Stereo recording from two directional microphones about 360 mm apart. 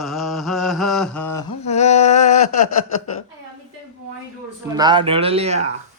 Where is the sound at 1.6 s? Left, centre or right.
Centre.